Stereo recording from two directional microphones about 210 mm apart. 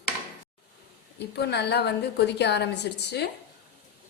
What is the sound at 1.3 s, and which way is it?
A woman's voice, 50° left (ahead or behind).